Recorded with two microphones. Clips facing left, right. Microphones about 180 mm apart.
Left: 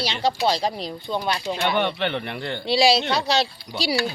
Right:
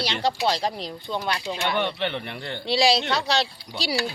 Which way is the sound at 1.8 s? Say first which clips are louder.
Left 3 dB; 65° left (ahead or behind).